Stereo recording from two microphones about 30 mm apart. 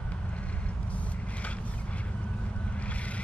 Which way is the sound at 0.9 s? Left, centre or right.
Left.